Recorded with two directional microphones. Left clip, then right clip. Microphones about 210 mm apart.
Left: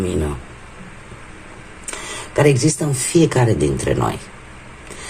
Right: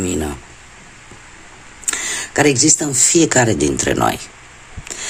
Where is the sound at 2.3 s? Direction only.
40° right (ahead or behind).